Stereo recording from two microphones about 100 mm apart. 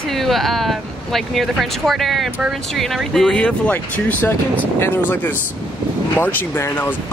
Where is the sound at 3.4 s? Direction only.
15° left (ahead or behind).